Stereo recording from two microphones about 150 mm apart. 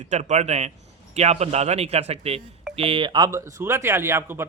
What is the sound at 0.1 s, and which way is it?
A man's voice, 50° right (ahead or behind).